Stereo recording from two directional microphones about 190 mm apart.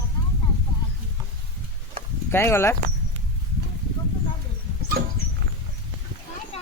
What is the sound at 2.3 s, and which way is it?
Speech, 15° left (ahead or behind).